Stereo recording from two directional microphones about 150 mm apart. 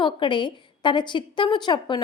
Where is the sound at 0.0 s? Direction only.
30° left (ahead or behind).